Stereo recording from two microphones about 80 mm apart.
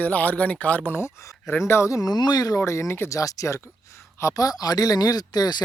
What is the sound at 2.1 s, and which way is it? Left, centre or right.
Speech, left.